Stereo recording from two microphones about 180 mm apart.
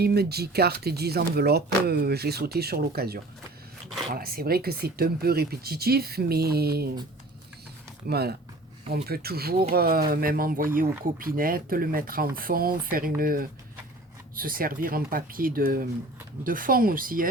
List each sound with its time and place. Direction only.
0.0 s speech: 60° right (ahead or behind)
8.0 s speech: 60° right (ahead or behind)